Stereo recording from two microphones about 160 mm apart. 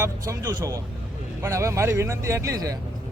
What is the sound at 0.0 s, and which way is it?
Speech, 20° right (ahead or behind).